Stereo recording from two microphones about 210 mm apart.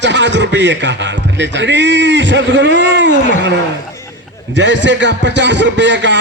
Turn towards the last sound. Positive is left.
turn(degrees=-60)  # may be behind; listen again after turning